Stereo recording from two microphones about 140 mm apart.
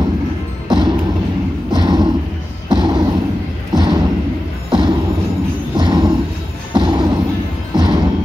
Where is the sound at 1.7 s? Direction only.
30° right (ahead or behind).